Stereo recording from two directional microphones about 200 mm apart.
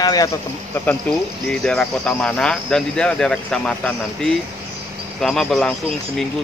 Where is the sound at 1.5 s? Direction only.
5° left (ahead or behind).